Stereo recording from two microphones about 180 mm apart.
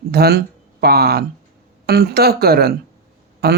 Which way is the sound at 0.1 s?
60° right (ahead or behind).